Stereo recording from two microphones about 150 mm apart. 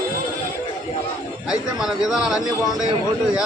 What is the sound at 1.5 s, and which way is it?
Speech, 5° right (ahead or behind).